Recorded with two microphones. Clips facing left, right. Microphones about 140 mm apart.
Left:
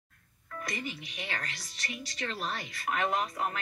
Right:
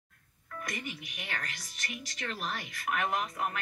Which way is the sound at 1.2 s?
Centre (ahead or behind).